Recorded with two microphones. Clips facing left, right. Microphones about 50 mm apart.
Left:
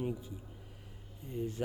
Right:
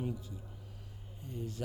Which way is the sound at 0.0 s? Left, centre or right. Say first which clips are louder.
Left 2 dB; left.